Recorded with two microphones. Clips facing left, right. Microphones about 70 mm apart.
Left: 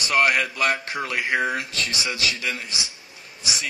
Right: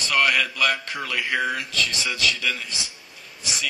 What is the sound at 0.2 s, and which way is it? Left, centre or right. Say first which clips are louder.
A man's voice: even; left.